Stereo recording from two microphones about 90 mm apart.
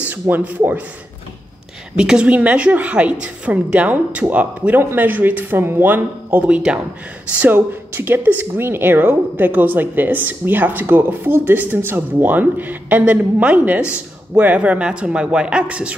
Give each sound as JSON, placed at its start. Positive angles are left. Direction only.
{"t": 0.1, "sound": "speech", "side_deg": -20}
{"t": 2.0, "sound": "a woman's voice", "side_deg": -10}